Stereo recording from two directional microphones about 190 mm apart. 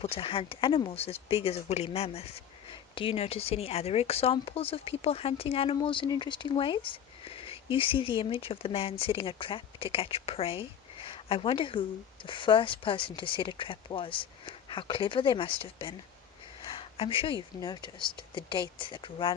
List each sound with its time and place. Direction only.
0.0 s speech: 30° left (ahead or behind)
16.6 s a sound: 30° left (ahead or behind)
17.6 s speech: 20° left (ahead or behind)